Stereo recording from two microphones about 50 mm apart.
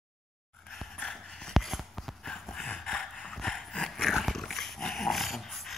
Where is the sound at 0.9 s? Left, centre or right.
Centre.